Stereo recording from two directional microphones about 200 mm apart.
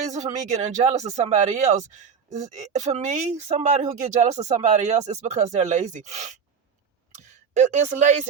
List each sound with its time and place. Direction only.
0.2 s speech: 35° right (ahead or behind)